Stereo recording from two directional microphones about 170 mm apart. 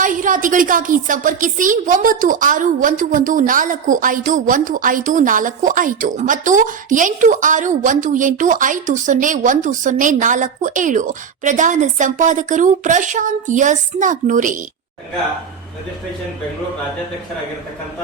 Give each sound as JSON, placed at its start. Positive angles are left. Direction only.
{"t": 0.0, "sound": "a woman's voice", "side_deg": -50}